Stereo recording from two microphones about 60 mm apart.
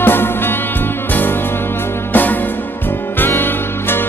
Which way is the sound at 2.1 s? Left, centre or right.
Left.